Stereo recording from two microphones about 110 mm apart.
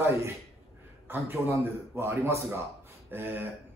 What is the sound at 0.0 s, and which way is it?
A man's voice, 25° right (ahead or behind).